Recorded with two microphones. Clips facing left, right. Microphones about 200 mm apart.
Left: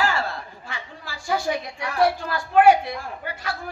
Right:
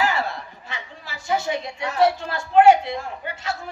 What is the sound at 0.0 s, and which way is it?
A woman's voice, 20° right (ahead or behind).